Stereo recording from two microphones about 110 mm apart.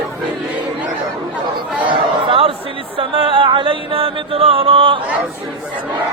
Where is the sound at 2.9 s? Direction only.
55° right (ahead or behind).